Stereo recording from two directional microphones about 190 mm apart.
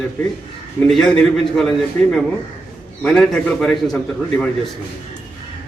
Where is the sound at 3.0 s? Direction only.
5° left (ahead or behind).